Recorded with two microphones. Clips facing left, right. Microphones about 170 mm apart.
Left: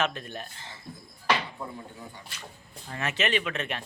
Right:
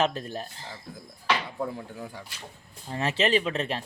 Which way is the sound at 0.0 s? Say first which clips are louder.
Right 4 dB; 35° right (ahead or behind).